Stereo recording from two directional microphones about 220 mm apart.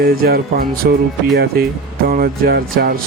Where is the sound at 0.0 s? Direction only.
45° right (ahead or behind).